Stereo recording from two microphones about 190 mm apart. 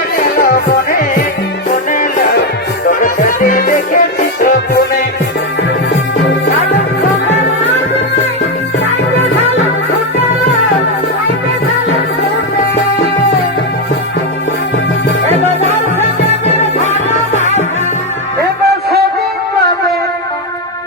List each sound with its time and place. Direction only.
0.3 s music: 50° left (ahead or behind)
16.8 s music: 35° left (ahead or behind)